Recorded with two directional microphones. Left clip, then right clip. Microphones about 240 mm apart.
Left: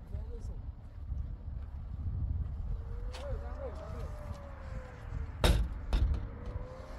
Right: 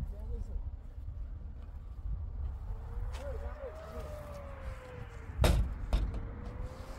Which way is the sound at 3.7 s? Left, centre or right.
Right.